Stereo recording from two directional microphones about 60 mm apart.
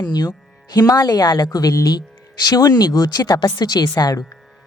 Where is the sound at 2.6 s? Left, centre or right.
Left.